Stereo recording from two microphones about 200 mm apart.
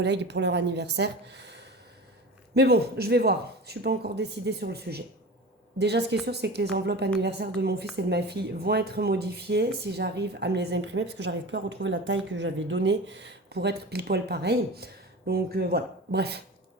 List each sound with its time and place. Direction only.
0.0 s speech: 60° right (ahead or behind)
2.6 s speech: 55° right (ahead or behind)